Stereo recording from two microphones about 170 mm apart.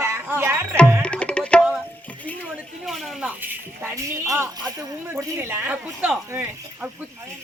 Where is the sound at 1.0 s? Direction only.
5° left (ahead or behind).